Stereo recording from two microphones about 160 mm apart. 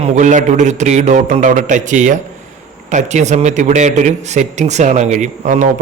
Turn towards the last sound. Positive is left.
turn(degrees=-50)  # may be behind; listen again after turning